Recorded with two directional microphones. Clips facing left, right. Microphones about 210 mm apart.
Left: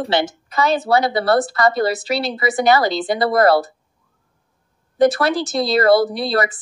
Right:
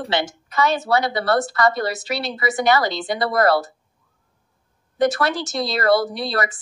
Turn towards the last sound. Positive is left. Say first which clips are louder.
# left 4 dB
turn(degrees=35)  # may be behind; listen again after turning